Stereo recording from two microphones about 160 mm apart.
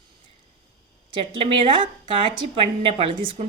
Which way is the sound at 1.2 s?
30° right (ahead or behind).